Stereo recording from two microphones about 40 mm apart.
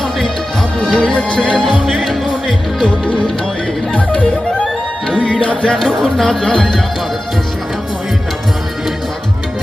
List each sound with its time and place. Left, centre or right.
0.8 s music: centre
3.9 s music: left
5.8 s speech: centre
6.2 s speech: centre